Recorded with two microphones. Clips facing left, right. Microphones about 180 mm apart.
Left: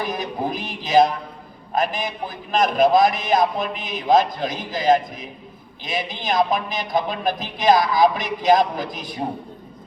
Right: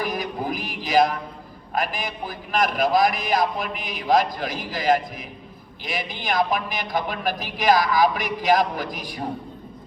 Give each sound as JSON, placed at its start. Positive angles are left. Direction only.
{"t": 0.0, "sound": "music", "side_deg": 25}
{"t": 1.7, "sound": "a man's voice", "side_deg": 25}